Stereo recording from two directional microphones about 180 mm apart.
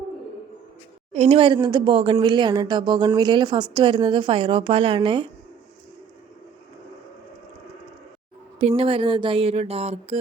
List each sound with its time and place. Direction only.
1.1 s a woman's voice: 35° right (ahead or behind)
8.5 s speech: 30° right (ahead or behind)